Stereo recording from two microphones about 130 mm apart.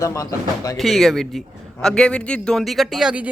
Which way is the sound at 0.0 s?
25° left (ahead or behind).